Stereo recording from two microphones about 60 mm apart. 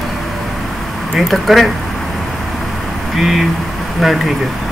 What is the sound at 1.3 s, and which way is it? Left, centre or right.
Speech, centre.